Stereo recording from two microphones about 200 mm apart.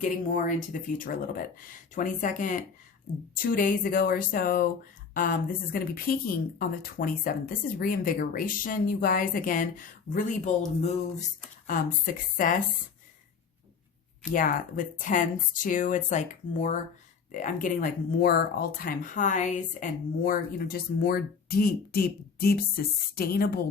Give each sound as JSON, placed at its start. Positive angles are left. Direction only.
{"t": 0.0, "sound": "speech", "side_deg": 40}
{"t": 11.6, "sound": "speech", "side_deg": 45}
{"t": 14.3, "sound": "speech", "side_deg": 40}